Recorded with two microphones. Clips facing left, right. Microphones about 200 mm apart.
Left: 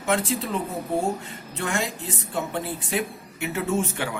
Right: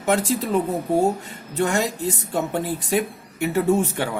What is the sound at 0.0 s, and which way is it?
Speech, 40° right (ahead or behind).